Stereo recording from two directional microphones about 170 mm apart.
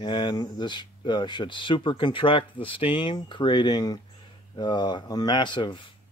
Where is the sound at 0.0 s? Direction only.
25° left (ahead or behind).